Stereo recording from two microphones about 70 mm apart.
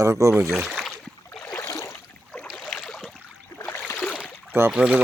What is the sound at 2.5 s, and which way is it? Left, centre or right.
Boat, centre.